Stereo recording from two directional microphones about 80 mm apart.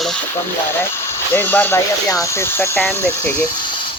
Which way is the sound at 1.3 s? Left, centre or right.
Left.